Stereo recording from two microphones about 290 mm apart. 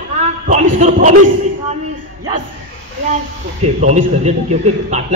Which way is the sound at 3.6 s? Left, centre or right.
Right.